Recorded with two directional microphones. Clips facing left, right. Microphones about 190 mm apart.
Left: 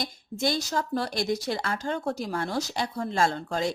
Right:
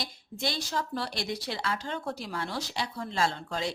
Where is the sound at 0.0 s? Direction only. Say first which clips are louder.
Left 6 dB; 45° left (ahead or behind).